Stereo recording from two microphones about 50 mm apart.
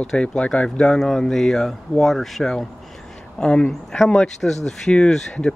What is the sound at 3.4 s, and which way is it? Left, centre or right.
Speech, centre.